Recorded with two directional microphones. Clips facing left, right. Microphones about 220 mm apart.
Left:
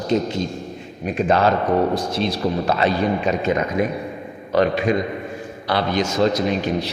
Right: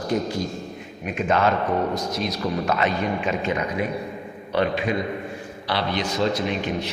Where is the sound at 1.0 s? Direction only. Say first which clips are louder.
Left 4 dB; 35° left (ahead or behind).